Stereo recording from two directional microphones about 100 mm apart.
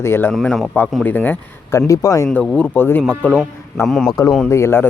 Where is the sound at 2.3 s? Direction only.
15° left (ahead or behind).